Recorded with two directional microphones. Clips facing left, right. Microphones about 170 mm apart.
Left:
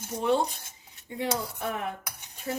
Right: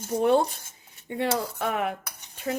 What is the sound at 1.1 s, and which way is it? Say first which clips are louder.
Speech: right 4 dB; 75° right (ahead or behind).